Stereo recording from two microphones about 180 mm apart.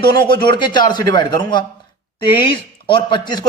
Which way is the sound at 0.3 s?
25° left (ahead or behind).